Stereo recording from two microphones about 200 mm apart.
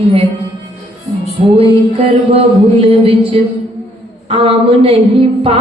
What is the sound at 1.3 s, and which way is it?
Music, 30° right (ahead or behind).